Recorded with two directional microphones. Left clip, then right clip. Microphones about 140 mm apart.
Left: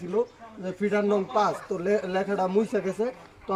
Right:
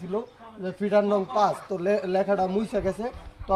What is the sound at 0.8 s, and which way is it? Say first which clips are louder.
A man's voice: right 2 dB; 30° right (ahead or behind).